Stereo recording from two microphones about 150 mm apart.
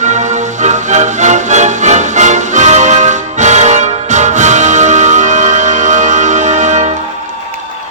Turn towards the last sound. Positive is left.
turn(degrees=-50)  # may be behind; listen again after turning